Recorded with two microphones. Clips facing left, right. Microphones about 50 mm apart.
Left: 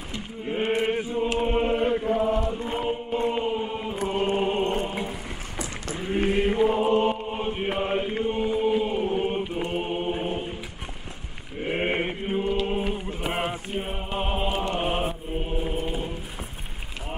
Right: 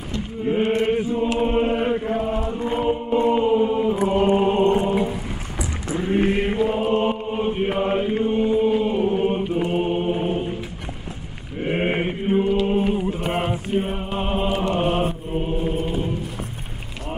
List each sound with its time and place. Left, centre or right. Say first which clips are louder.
0.5 s chant: right 5 dB; centre
0.7 s chant: right 5 dB; centre
1.4 s chant: right 4 dB; centre
1.7 s chant: right 2 dB; centre
4.8 s a sound: right 9 dB; centre
5.9 s a sound: right 5 dB; centre
6.6 s chant: left 1 dB; centre
6.9 s chant: right 2 dB; centre
11.6 s mantra: right 4 dB; centre
12.4 s chant: right 6 dB; centre